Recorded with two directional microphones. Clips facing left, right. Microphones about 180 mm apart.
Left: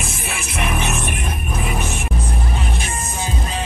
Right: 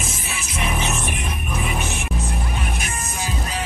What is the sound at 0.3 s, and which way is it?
Music, 65° left (ahead or behind).